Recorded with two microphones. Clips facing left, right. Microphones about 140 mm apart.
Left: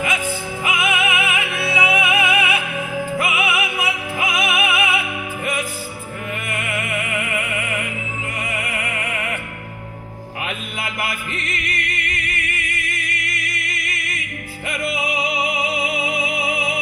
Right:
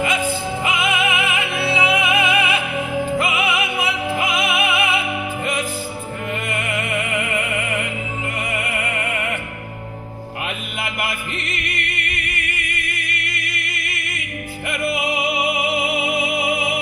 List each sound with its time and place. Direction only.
0.0 s music: 25° right (ahead or behind)
6.6 s music: 30° right (ahead or behind)
11.1 s music: 25° right (ahead or behind)
15.4 s music: 20° left (ahead or behind)
15.9 s music: 25° right (ahead or behind)